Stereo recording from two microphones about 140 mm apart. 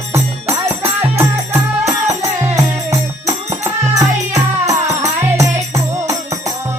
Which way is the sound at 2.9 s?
25° right (ahead or behind).